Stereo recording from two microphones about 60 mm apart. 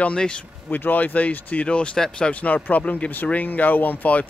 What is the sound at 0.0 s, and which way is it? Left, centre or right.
Speech, centre.